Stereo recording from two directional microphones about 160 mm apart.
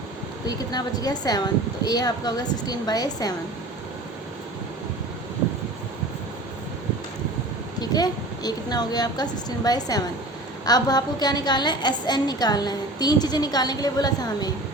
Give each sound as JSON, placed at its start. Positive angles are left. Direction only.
{"t": 0.4, "sound": "a woman's voice", "side_deg": 25}
{"t": 7.8, "sound": "a woman's voice", "side_deg": 25}